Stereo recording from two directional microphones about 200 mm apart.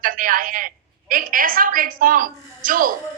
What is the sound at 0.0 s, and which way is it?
A woman's voice, 45° right (ahead or behind).